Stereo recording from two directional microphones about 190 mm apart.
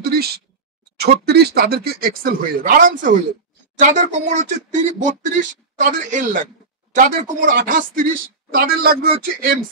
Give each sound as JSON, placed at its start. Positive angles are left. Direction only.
{"t": 0.0, "sound": "speech", "side_deg": -55}